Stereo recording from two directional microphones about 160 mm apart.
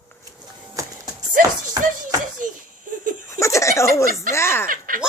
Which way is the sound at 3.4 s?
20° left (ahead or behind).